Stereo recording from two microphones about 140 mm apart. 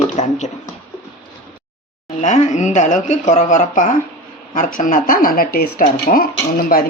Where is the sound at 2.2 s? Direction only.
60° left (ahead or behind).